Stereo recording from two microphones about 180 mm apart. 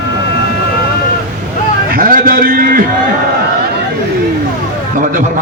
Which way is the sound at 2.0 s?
50° right (ahead or behind).